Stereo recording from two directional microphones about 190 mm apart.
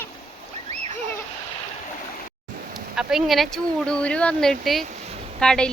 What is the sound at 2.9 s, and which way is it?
Speech, centre (ahead or behind).